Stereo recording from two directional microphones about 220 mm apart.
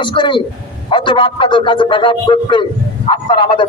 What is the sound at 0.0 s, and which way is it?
A man's voice, 20° left (ahead or behind).